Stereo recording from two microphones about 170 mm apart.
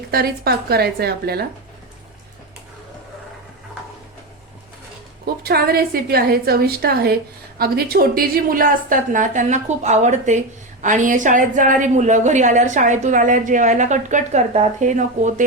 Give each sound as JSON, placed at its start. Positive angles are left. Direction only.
{"t": 0.1, "sound": "speech", "side_deg": -65}
{"t": 5.2, "sound": "a woman's voice", "side_deg": -65}